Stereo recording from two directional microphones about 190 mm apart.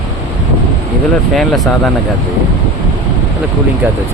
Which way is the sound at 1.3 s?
Centre (ahead or behind).